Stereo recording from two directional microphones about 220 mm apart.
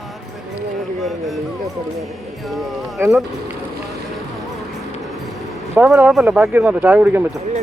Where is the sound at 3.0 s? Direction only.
10° right (ahead or behind).